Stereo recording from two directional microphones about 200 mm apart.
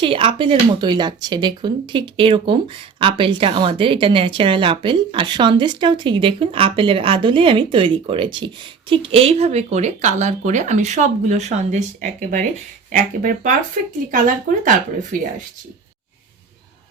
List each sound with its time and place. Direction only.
0.0 s speech: 25° right (ahead or behind); by 15.3 s 40° right (ahead or behind)